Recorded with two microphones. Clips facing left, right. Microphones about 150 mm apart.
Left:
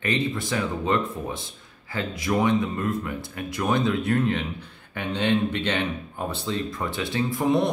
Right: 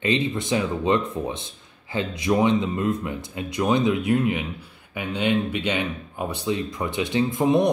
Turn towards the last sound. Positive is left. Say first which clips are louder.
# right 3 dB
turn(degrees=-20)  # may be behind; listen again after turning